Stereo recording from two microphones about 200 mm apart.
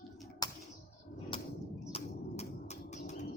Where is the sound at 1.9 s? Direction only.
35° left (ahead or behind).